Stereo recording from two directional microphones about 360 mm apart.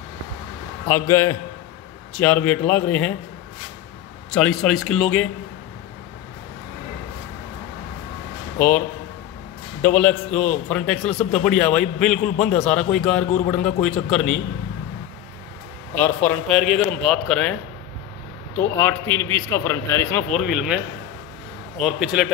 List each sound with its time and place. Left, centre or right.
0.8 s a man's voice: centre
4.3 s a man's voice: centre
8.5 s a man's voice: centre
15.9 s a man's voice: centre
18.8 s a man's voice: centre